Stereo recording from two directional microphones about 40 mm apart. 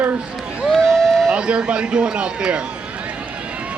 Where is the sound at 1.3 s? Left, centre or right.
Right.